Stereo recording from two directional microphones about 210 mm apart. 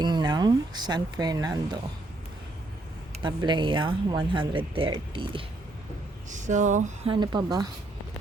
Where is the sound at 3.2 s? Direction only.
20° right (ahead or behind).